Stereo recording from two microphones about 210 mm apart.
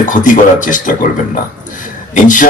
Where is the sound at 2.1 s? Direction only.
40° left (ahead or behind).